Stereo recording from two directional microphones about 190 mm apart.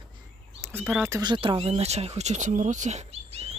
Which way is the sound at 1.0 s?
20° right (ahead or behind).